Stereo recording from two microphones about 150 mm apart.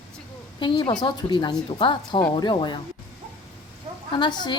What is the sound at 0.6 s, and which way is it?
A woman's voice, 35° left (ahead or behind).